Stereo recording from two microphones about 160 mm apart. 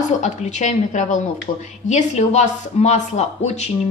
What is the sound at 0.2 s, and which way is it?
A woman's voice, 45° left (ahead or behind).